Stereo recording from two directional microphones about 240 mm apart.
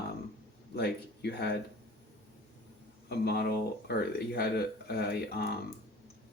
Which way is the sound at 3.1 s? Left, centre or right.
Left.